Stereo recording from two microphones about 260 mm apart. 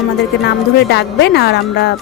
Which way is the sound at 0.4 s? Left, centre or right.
Left.